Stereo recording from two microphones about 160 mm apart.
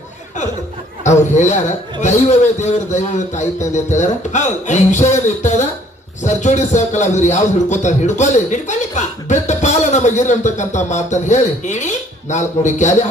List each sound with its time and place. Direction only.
1.0 s a man's voice: 45° left (ahead or behind)